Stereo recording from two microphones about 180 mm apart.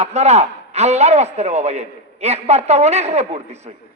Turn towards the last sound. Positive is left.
turn(degrees=-35)  # may be behind; listen again after turning